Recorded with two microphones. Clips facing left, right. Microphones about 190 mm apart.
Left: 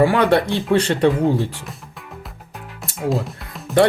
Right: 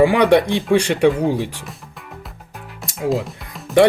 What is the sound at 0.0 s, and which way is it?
Speech, 15° right (ahead or behind).